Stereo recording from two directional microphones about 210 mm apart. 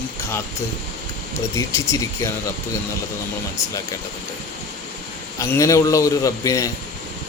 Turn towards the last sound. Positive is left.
turn(degrees=15)  # may be behind; listen again after turning